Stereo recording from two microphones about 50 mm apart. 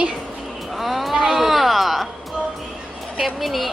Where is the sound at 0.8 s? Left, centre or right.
Centre.